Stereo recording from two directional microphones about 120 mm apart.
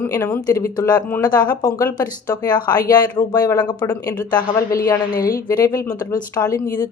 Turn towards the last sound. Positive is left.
turn(degrees=30)  # may be behind; listen again after turning